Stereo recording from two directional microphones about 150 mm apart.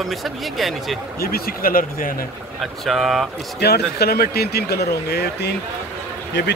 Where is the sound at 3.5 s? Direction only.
90° left.